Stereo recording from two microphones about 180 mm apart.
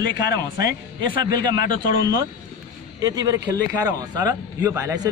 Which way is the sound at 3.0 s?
20° right (ahead or behind).